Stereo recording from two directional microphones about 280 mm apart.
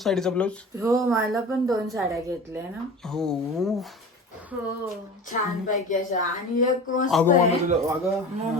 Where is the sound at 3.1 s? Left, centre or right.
Centre.